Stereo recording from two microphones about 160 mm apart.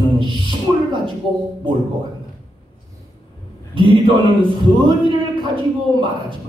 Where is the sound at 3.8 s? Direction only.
30° right (ahead or behind).